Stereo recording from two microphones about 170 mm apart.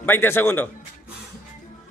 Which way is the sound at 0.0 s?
10° left (ahead or behind).